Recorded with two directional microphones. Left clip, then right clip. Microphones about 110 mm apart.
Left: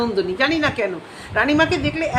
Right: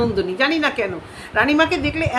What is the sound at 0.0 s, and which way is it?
A woman's voice, 15° right (ahead or behind).